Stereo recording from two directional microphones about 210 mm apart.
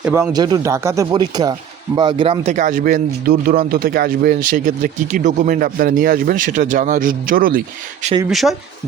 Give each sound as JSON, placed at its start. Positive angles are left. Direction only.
{"t": 0.0, "sound": "speech", "side_deg": -10}
{"t": 8.3, "sound": "speech", "side_deg": 0}